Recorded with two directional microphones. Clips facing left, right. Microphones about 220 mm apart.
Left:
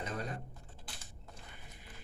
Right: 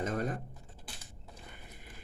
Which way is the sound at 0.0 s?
50° right (ahead or behind).